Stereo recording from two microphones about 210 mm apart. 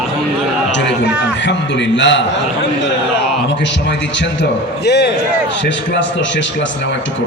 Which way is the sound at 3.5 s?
55° left (ahead or behind).